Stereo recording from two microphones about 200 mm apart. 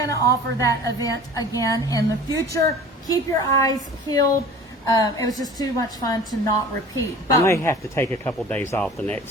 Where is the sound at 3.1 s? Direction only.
15° left (ahead or behind).